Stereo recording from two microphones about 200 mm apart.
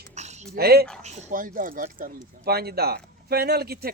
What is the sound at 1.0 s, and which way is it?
Speech, 35° right (ahead or behind).